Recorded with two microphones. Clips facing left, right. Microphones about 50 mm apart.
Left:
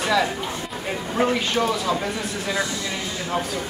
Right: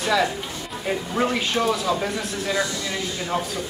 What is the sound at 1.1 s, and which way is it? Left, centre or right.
Speech, centre.